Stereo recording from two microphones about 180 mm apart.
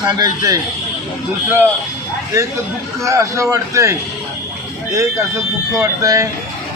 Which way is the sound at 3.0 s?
15° right (ahead or behind).